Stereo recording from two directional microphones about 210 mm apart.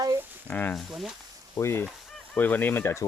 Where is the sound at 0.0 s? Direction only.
15° right (ahead or behind).